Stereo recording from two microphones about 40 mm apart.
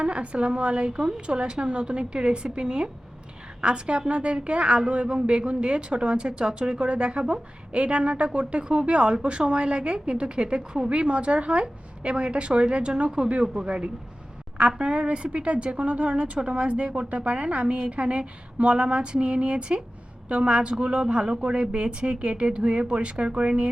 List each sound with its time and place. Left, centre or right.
0.0 s a woman's voice: right